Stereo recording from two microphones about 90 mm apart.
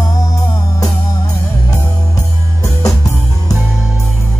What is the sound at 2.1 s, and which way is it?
Music, 40° left (ahead or behind).